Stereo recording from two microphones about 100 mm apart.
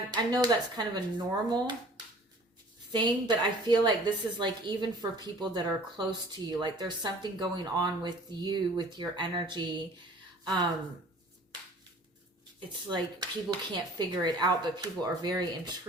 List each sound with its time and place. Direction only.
0.1 s a woman's voice: 45° right (ahead or behind)
2.9 s a woman's voice: 50° right (ahead or behind)
12.5 s a woman's voice: 50° right (ahead or behind)